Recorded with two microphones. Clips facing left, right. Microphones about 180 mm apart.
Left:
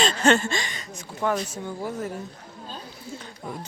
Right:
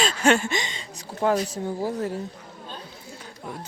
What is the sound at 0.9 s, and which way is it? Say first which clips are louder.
Speech: right 3 dB; 35° right (ahead or behind).